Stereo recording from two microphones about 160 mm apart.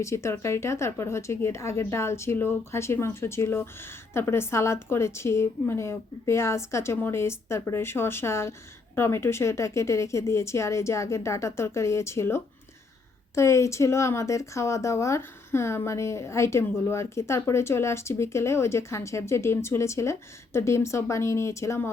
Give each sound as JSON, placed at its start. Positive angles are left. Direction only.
{"t": 0.0, "sound": "a woman's voice", "side_deg": 20}